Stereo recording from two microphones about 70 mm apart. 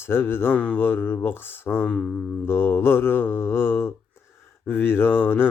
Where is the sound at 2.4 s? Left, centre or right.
Left.